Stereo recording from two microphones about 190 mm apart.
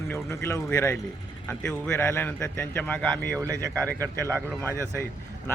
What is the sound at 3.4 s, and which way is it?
Speech, 15° right (ahead or behind).